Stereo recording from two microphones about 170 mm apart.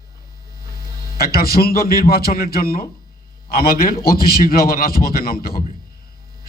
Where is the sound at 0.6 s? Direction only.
60° left (ahead or behind).